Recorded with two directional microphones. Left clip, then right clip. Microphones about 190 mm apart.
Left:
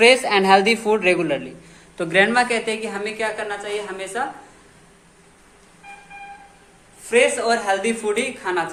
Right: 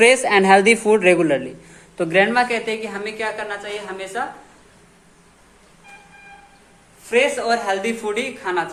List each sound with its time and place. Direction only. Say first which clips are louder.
0.0 s a man's voice: right 1 dB; 30° right (ahead or behind)
2.0 s a man's voice: right 1 dB; 15° right (ahead or behind)
2.3 s a woman's voice: even; centre (ahead or behind)
7.0 s a woman's voice: left 1 dB; centre (ahead or behind)